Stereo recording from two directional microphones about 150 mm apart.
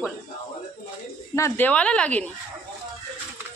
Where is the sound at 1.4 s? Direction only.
15° left (ahead or behind).